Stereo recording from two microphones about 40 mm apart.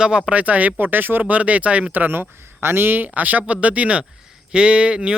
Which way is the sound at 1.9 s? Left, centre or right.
Right.